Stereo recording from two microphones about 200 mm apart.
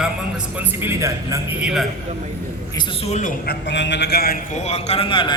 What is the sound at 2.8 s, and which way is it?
Speech, 35° left (ahead or behind).